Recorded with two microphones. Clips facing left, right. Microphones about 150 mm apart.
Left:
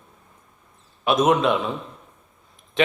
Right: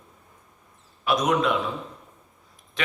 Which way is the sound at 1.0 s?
25° left (ahead or behind).